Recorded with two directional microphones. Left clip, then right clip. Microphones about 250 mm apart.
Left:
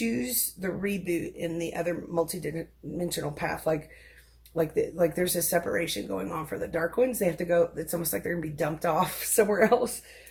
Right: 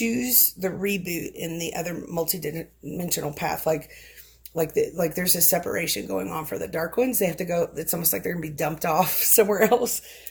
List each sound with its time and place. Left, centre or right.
0.0 s speech: right